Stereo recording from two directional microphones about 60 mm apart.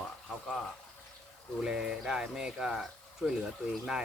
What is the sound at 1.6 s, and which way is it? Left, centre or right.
Speech, centre.